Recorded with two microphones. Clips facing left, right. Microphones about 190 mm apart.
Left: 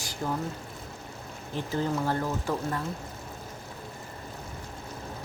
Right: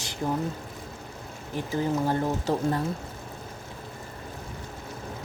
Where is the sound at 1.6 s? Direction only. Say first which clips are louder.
Right 2 dB; 15° right (ahead or behind).